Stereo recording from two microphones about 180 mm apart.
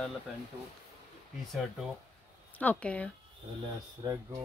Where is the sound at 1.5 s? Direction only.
Centre (ahead or behind).